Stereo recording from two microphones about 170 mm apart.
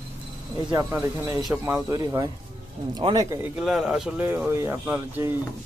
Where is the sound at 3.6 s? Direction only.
5° right (ahead or behind).